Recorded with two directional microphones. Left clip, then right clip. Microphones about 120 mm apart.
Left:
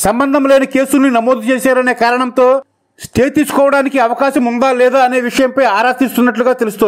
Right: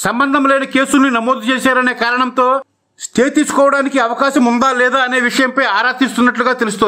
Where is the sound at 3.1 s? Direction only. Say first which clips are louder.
Left 1 dB; 30° left (ahead or behind).